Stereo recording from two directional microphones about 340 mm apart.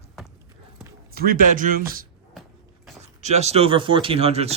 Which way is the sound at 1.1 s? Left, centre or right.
Right.